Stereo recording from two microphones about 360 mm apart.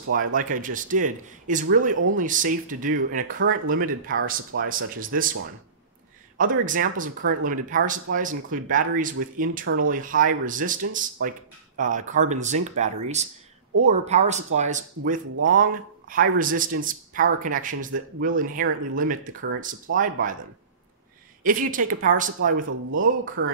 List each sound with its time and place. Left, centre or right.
0.1 s speech: right
6.3 s speech: right
21.4 s speech: right